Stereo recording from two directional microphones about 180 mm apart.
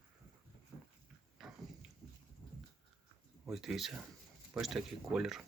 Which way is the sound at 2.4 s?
20° left (ahead or behind).